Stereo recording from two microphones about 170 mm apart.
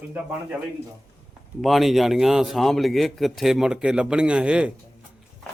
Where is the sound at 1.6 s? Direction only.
Centre (ahead or behind).